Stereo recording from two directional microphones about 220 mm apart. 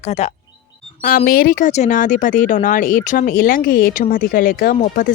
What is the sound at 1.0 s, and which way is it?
Speech, 40° left (ahead or behind).